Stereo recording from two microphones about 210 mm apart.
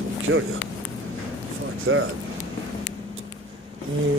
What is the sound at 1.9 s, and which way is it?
Speech, 70° right (ahead or behind).